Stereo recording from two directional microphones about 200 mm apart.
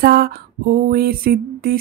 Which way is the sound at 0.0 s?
50° right (ahead or behind).